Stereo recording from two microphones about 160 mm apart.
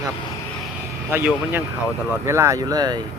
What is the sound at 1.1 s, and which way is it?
Speech, 10° right (ahead or behind).